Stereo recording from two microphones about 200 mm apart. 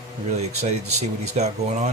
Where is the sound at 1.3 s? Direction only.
35° right (ahead or behind).